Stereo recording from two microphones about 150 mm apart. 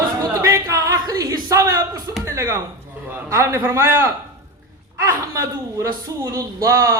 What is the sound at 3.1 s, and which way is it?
A man's voice, 20° right (ahead or behind).